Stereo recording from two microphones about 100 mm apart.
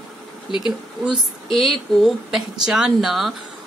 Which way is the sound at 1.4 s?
Centre (ahead or behind).